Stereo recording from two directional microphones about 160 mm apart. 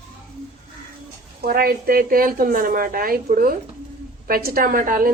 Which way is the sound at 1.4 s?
70° right (ahead or behind).